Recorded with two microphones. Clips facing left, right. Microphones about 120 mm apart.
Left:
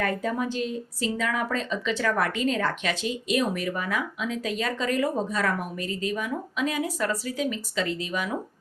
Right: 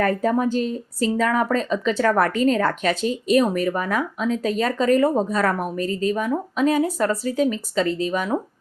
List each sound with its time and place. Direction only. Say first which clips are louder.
0.0 s speech: right 7 dB; 40° right (ahead or behind)